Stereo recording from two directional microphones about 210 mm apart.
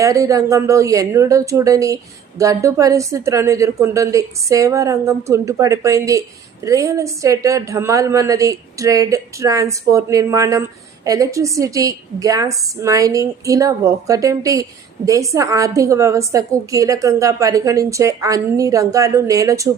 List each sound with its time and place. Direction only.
0.0 s a woman's voice: 15° right (ahead or behind)